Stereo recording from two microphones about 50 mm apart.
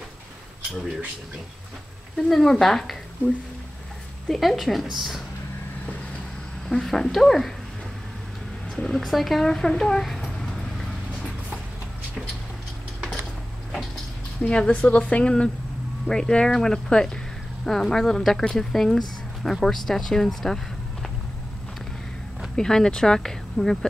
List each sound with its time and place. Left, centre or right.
2.1 s speech: centre
4.3 s a woman's voice: centre
6.7 s a woman's voice: centre
8.7 s speech: centre
9.0 s speech: centre
10.4 s vehicle: centre
14.4 s a woman's voice: left
22.6 s speech: centre